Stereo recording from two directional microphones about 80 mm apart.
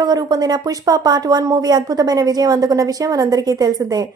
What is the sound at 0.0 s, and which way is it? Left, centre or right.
A woman's voice, right.